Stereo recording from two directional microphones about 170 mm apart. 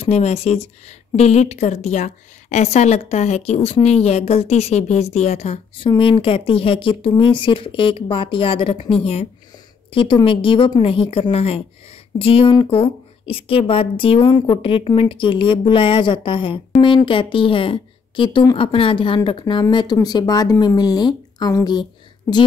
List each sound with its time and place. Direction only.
0.0 s speech: 40° left (ahead or behind)
5.9 s a woman's voice: 30° left (ahead or behind)